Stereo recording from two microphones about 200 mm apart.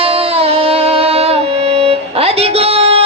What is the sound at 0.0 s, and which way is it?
Music, 30° right (ahead or behind).